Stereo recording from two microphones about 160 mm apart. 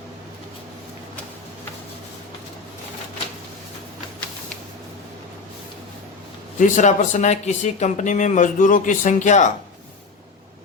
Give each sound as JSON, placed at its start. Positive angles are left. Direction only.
{"t": 6.6, "sound": "speech", "side_deg": 50}